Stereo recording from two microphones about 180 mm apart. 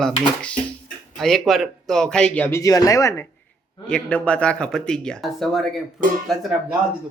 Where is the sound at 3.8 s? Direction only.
5° left (ahead or behind).